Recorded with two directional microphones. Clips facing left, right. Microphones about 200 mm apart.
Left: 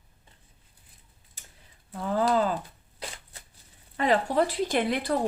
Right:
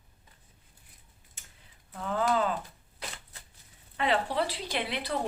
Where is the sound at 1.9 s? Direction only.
35° left (ahead or behind).